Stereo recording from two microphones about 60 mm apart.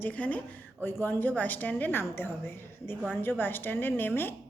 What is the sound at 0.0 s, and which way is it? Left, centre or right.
A woman's voice, left.